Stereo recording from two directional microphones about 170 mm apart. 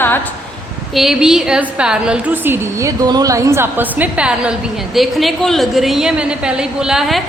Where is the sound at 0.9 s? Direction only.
Centre (ahead or behind).